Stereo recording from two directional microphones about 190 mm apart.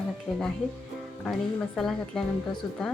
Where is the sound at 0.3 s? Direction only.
20° left (ahead or behind).